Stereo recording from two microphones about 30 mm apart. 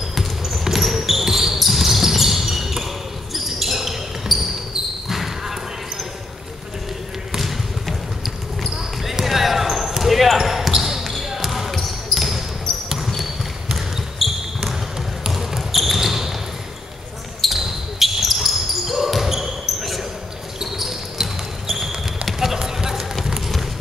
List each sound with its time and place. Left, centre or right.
0.1 s basketball bounce: centre
7.3 s basketball bounce: centre
14.2 s basketball bounce: centre
17.6 s basketball bounce: centre
22.6 s run: centre